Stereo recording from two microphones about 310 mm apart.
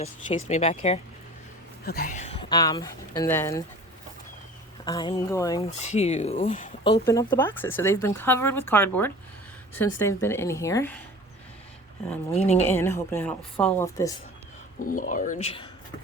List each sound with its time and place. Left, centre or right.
0.0 s speech: left
4.9 s speech: centre
12.3 s speech: left
12.6 s speech: centre
14.8 s speech: left